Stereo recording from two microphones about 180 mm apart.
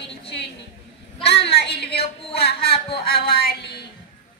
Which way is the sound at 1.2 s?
65° left (ahead or behind).